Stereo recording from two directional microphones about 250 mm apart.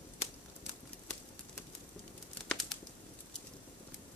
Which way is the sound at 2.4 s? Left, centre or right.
Centre.